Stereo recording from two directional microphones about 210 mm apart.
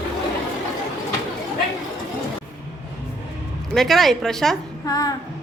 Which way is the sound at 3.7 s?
Centre (ahead or behind).